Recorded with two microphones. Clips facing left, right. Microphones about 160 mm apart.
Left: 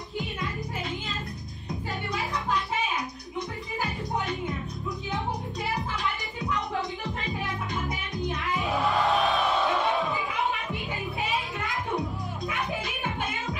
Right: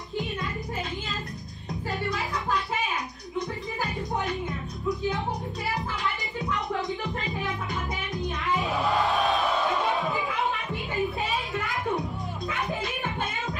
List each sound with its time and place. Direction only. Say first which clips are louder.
9.1 s music: even; 40° right (ahead or behind)